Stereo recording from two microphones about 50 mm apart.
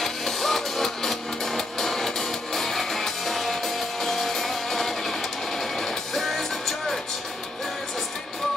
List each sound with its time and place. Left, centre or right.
0.0 s music: centre